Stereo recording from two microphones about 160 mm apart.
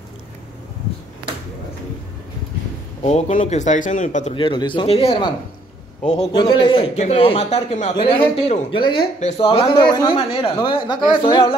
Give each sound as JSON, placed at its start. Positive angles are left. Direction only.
{"t": 3.0, "sound": "speech", "side_deg": 45}
{"t": 4.3, "sound": "a man's voice", "side_deg": 30}
{"t": 6.3, "sound": "a man's voice", "side_deg": 30}
{"t": 7.9, "sound": "a man's voice", "side_deg": 30}